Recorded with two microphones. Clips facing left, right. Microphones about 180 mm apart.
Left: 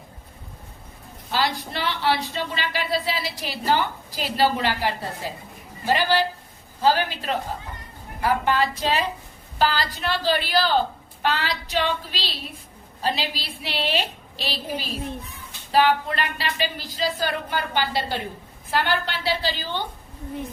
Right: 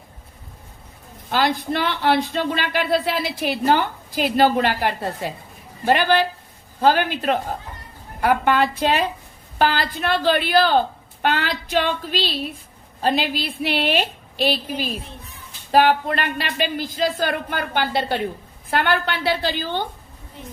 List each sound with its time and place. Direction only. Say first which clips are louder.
1.3 s a woman's voice: right 5 dB; 55° right (ahead or behind)